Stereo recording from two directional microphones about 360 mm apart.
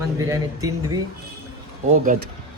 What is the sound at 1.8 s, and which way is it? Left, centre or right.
Speech, right.